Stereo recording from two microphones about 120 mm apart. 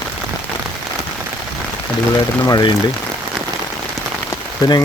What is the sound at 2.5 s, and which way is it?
Speech, 35° left (ahead or behind).